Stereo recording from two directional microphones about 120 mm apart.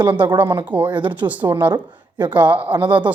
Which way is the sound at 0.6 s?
15° right (ahead or behind).